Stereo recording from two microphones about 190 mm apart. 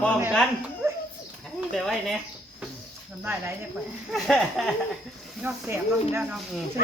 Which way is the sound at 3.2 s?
10° right (ahead or behind).